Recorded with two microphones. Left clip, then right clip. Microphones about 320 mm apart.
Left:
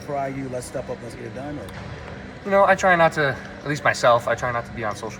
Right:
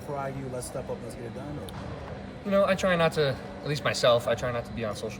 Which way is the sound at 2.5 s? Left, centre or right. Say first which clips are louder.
Left 8 dB; centre.